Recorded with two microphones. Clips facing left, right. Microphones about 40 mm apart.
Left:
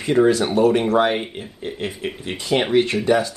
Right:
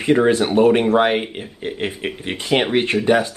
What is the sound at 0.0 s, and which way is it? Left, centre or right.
Speech, right.